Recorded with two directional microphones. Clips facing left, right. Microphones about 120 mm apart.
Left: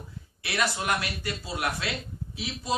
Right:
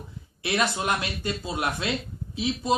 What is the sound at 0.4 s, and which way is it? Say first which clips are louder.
Speech: right 3 dB; 20° right (ahead or behind).